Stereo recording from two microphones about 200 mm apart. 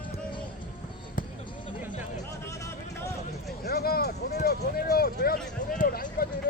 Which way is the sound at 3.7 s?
50° left (ahead or behind).